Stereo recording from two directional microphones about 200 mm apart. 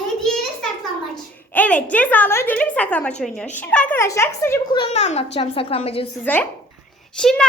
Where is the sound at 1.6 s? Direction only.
5° left (ahead or behind).